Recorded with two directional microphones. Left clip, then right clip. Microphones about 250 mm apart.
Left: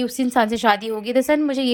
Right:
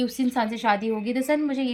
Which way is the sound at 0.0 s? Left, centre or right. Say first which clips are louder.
Left 6 dB; centre.